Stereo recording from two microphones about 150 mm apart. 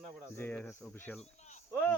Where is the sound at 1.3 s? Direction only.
50° left (ahead or behind).